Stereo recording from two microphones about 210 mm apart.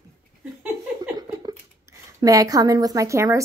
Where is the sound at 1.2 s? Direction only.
20° right (ahead or behind).